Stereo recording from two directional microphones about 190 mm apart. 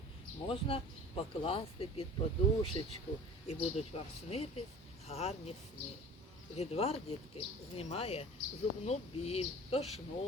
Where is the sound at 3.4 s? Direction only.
30° left (ahead or behind).